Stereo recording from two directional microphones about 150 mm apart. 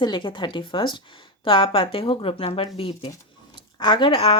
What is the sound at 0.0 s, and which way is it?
Speech, 30° left (ahead or behind).